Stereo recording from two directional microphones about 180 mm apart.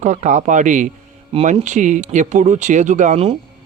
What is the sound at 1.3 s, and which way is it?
Speech, 35° right (ahead or behind).